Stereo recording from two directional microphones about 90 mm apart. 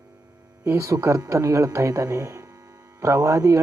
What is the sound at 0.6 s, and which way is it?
Speech, 35° right (ahead or behind).